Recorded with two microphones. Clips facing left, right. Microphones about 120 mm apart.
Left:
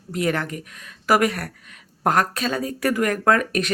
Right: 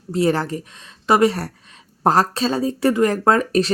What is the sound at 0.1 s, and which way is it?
A woman's voice, 30° right (ahead or behind).